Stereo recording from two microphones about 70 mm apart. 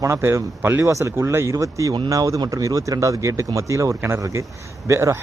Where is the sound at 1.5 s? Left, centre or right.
Right.